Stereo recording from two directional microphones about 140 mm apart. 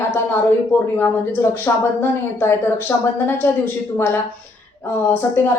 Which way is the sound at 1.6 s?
15° left (ahead or behind).